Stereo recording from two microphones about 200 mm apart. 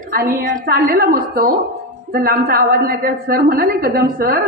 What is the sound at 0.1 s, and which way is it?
A woman's voice, 45° right (ahead or behind).